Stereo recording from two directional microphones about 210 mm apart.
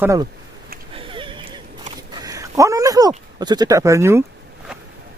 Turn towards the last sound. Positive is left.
turn(degrees=-15)  # may be behind; listen again after turning